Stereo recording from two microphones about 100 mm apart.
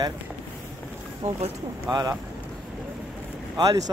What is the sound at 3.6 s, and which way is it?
Speech, 40° right (ahead or behind).